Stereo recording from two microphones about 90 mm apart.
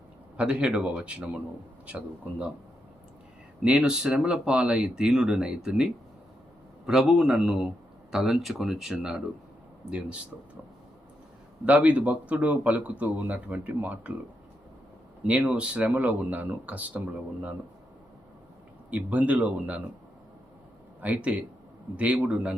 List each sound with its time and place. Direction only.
0.3 s speech: 10° right (ahead or behind)
3.6 s speech: 10° right (ahead or behind)
11.6 s speech: 15° right (ahead or behind)
15.3 s speech: 10° right (ahead or behind)
18.9 s speech: 15° right (ahead or behind)
21.0 s speech: 15° right (ahead or behind)